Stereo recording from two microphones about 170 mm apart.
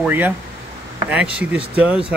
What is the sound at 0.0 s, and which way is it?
Speech, 10° right (ahead or behind).